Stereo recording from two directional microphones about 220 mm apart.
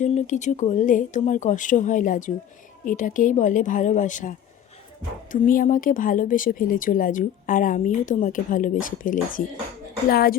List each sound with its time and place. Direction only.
0.0 s a woman's voice: 35° left (ahead or behind)